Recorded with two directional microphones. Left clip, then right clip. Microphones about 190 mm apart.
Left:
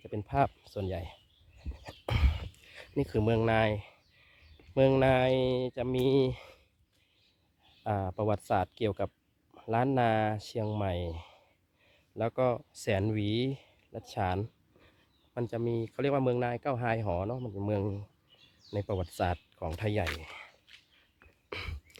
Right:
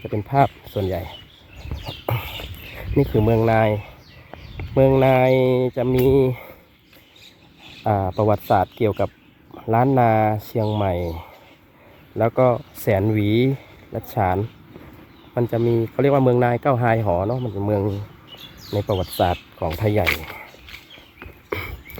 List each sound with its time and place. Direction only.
0.1 s speech: 20° left (ahead or behind)
1.8 s a sound: 50° left (ahead or behind)
2.7 s speech: 20° left (ahead or behind)
5.2 s speech: 15° left (ahead or behind)
7.9 s speech: 20° left (ahead or behind)
13.2 s speech: 10° left (ahead or behind)
15.4 s speech: 20° left (ahead or behind)
17.1 s speech: 25° left (ahead or behind)
21.5 s a sound: 15° left (ahead or behind)